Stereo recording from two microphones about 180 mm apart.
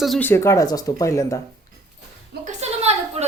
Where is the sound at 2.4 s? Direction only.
35° right (ahead or behind).